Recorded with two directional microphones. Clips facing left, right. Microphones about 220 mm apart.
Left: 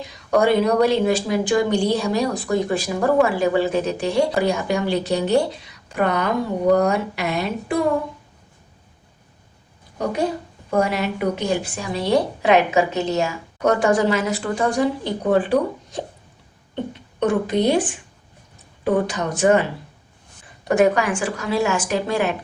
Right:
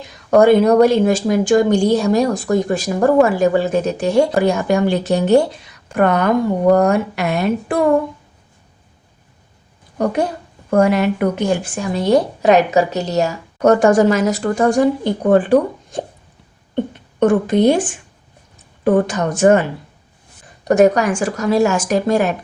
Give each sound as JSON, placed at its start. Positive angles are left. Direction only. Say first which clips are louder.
{"t": 0.3, "sound": "a woman's voice", "louder": "right 6 dB", "side_deg": -50}
{"t": 10.0, "sound": "a woman's voice", "louder": "right 4 dB", "side_deg": -50}
{"t": 17.2, "sound": "a woman's voice", "louder": "right 6 dB", "side_deg": -50}
{"t": 20.7, "sound": "a woman's voice", "louder": "right 5 dB", "side_deg": -40}